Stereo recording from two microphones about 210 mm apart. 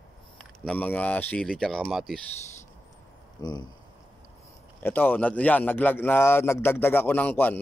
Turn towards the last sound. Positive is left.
turn(degrees=10)  # may be behind; listen again after turning